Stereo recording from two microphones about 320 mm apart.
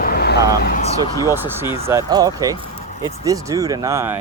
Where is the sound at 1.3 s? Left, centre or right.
Centre.